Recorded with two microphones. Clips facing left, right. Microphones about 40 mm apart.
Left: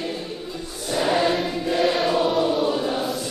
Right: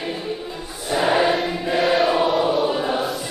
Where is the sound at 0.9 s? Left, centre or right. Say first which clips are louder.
Right 3 dB; centre.